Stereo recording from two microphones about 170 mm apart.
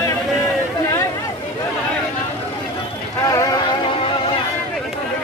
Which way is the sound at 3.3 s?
20° left (ahead or behind).